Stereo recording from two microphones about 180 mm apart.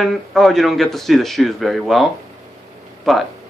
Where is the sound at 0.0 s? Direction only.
Centre (ahead or behind).